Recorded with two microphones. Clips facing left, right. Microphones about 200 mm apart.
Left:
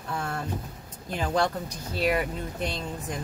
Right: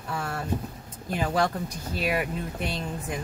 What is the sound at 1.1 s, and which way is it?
Speech, 5° right (ahead or behind).